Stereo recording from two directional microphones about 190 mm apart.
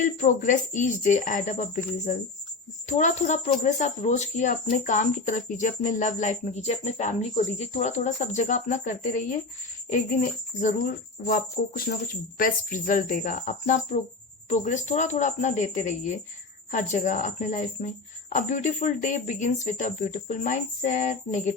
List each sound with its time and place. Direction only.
0.0 s speech: 40° left (ahead or behind)
2.9 s speech: 40° left (ahead or behind)
11.3 s speech: 50° left (ahead or behind)